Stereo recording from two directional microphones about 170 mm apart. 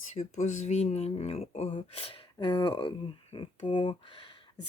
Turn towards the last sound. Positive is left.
turn(degrees=30)  # may be behind; listen again after turning